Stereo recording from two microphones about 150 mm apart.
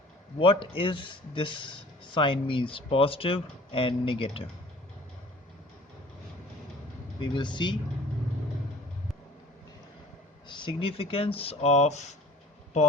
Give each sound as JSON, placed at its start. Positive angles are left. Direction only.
{"t": 0.3, "sound": "speech", "side_deg": 35}
{"t": 7.2, "sound": "speech", "side_deg": 30}
{"t": 10.5, "sound": "speech", "side_deg": 30}